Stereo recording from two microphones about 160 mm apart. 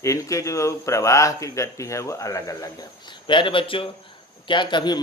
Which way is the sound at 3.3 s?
30° left (ahead or behind).